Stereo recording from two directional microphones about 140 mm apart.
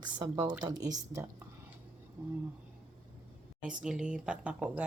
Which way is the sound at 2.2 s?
10° right (ahead or behind).